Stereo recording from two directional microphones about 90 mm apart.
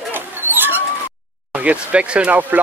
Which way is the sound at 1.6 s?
15° right (ahead or behind).